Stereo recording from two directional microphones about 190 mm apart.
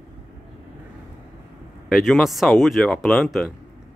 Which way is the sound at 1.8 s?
Centre (ahead or behind).